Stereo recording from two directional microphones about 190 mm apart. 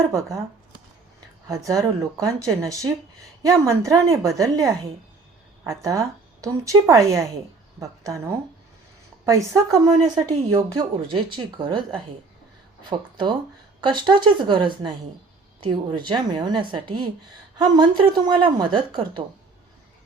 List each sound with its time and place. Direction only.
1.5 s speech: 15° right (ahead or behind)
12.9 s speech: 25° right (ahead or behind)